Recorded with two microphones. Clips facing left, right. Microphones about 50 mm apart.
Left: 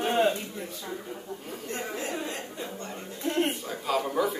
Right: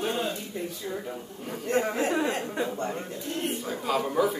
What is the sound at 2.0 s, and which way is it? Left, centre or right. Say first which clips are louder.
Speech: right 7 dB; right.